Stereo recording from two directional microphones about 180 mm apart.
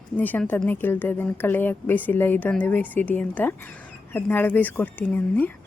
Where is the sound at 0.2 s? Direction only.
10° left (ahead or behind).